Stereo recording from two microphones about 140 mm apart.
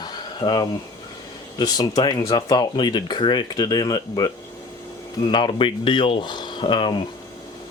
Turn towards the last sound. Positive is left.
turn(degrees=35)  # may be behind; listen again after turning